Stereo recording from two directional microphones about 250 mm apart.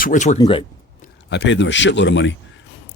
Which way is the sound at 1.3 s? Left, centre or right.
Left.